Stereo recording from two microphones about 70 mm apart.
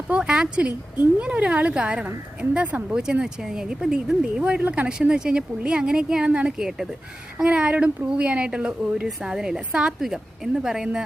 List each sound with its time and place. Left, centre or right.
0.2 s speech: centre